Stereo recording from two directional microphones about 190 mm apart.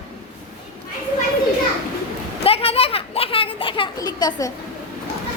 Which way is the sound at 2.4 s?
30° left (ahead or behind).